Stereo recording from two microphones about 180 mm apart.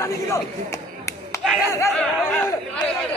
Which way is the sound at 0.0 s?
15° left (ahead or behind).